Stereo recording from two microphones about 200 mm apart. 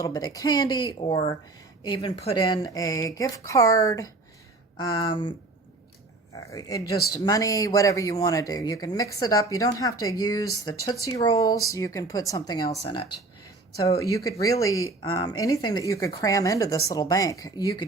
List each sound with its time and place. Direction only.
0.0 s speech: 20° left (ahead or behind)
6.3 s speech: 20° left (ahead or behind)
13.7 s speech: 15° left (ahead or behind)